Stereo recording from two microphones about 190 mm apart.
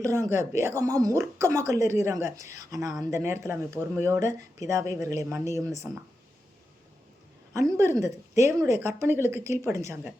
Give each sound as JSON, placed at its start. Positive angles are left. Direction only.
{"t": 0.0, "sound": "speech", "side_deg": -15}
{"t": 7.5, "sound": "speech", "side_deg": -15}